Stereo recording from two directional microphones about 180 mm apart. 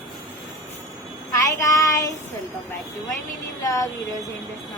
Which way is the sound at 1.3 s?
20° left (ahead or behind).